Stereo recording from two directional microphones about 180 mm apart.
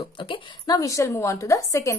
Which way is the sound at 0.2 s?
25° left (ahead or behind).